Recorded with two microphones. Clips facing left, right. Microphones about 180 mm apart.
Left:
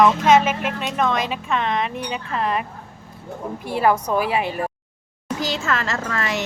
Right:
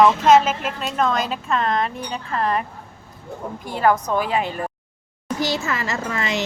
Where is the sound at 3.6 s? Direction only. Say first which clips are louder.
Even; 10° left (ahead or behind).